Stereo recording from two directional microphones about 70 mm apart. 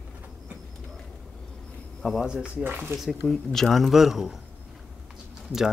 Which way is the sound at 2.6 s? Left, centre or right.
Right.